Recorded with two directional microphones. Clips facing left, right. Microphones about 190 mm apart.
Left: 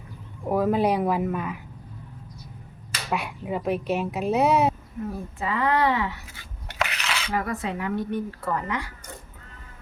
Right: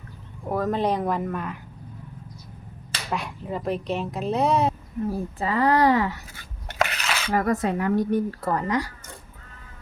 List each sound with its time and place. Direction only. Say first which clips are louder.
0.4 s speech: left 2 dB; 10° left (ahead or behind)
3.1 s speech: left 1 dB; 5° left (ahead or behind)
5.0 s speech: right 3 dB; 35° right (ahead or behind)